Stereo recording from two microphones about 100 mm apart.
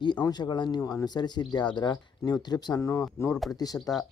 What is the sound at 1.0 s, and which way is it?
Speech, 45° left (ahead or behind).